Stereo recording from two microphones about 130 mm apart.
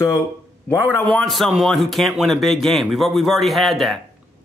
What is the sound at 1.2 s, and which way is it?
A man's voice, centre (ahead or behind).